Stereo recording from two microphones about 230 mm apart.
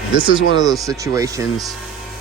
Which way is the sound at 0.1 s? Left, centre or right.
Right.